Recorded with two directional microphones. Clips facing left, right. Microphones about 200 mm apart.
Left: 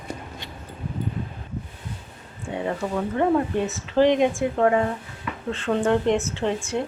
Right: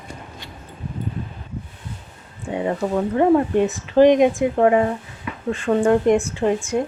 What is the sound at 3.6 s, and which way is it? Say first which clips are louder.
Speech: right 6 dB; 15° right (ahead or behind).